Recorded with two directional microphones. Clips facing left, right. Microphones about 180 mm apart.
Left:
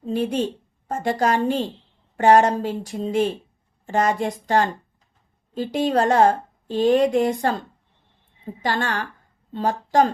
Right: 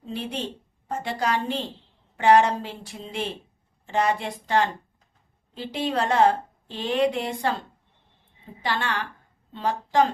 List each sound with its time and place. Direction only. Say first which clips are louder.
0.0 s a woman's voice: left 9 dB; 45° left (ahead or behind)
8.6 s a woman's voice: left 3 dB; 45° left (ahead or behind)